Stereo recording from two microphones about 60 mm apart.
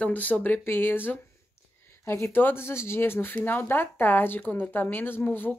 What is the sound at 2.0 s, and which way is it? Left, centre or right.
Speech, left.